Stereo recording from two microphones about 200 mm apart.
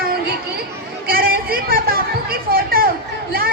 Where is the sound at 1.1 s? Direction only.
45° right (ahead or behind).